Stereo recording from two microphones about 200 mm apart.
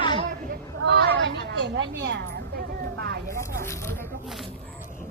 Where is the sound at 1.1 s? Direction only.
65° right (ahead or behind).